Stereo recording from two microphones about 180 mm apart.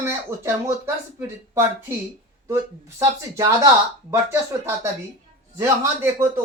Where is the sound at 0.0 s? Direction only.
15° right (ahead or behind).